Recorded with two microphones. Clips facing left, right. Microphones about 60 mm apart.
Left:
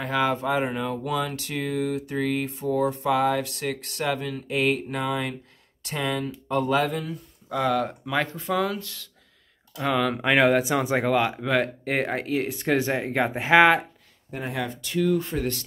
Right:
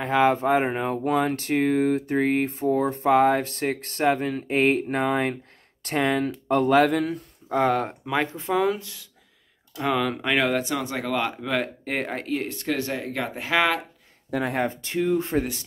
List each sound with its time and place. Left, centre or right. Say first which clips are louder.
0.0 s speech: right 4 dB; right
7.5 s speech: right 2 dB; right
8.0 s speech: right 1 dB; centre
9.8 s speech: even; centre
10.1 s speech: left 3 dB; centre
11.1 s speech: left 3 dB; centre
12.5 s speech: left 3 dB; centre
14.5 s speech: right 3 dB; right